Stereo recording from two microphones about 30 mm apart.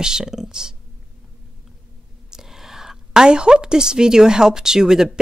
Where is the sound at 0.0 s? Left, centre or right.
Right.